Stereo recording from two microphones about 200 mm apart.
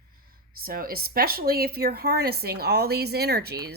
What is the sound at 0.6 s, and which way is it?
Speech, 45° right (ahead or behind).